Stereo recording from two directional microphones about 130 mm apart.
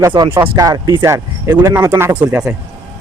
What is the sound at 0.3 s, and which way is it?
Speech, 15° right (ahead or behind).